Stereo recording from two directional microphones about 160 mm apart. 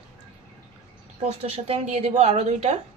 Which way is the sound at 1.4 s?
45° right (ahead or behind).